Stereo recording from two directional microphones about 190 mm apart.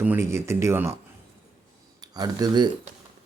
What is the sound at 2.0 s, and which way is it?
Speech, 20° right (ahead or behind).